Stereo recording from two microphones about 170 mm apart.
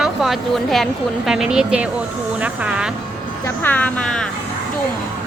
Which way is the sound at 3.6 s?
10° left (ahead or behind).